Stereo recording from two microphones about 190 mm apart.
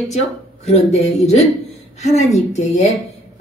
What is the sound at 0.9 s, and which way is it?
Speech, 35° left (ahead or behind).